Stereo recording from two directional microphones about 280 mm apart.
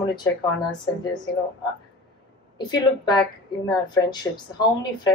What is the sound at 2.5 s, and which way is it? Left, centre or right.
Speech, centre.